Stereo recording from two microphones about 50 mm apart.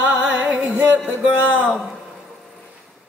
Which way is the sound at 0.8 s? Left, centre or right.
Left.